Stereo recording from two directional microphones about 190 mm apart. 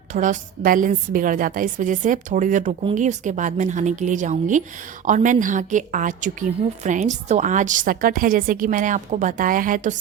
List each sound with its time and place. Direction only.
0.1 s a woman's voice: 40° right (ahead or behind)